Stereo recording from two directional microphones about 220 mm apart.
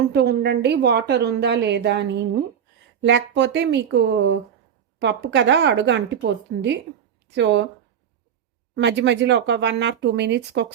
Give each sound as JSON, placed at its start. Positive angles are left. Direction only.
{"t": 0.1, "sound": "a woman's voice", "side_deg": -50}
{"t": 8.7, "sound": "a woman's voice", "side_deg": -55}